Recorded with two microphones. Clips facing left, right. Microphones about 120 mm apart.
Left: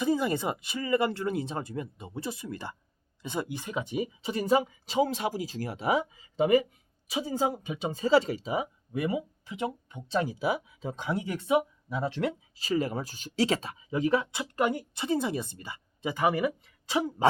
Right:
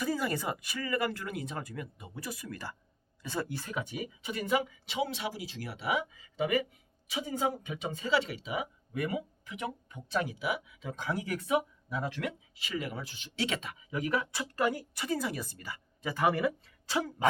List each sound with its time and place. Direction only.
0.0 s speech: 25° left (ahead or behind)